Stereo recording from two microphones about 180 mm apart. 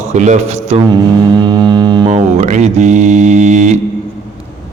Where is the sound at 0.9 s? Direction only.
25° right (ahead or behind).